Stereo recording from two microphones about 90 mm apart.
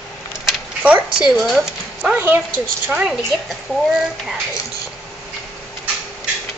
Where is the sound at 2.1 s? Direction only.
20° right (ahead or behind).